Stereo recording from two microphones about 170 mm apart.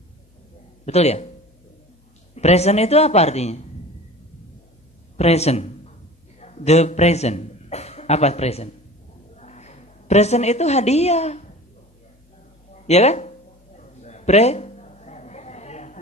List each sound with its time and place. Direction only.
0.9 s speech: 40° left (ahead or behind)
2.3 s speech: 40° left (ahead or behind)
5.1 s a man's voice: 40° left (ahead or behind)
12.9 s speech: 40° left (ahead or behind)
13.7 s a sound: 40° left (ahead or behind)